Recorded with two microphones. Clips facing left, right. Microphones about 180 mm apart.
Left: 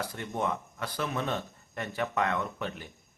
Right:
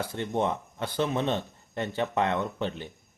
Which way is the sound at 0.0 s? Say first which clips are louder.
Right 4 dB; 25° right (ahead or behind).